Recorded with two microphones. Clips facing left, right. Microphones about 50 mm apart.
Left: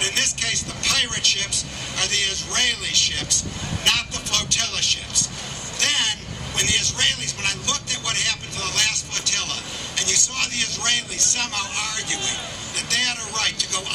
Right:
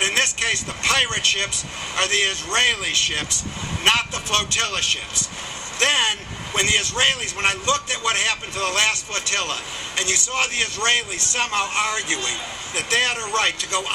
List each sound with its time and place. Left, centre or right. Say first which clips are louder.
0.0 s a man's voice: right 4 dB; right
12.7 s a man's voice: right 4 dB; right